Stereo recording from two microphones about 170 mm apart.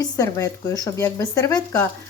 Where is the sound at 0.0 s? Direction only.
20° left (ahead or behind).